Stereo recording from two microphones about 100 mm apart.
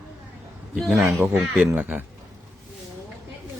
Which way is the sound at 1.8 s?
15° right (ahead or behind).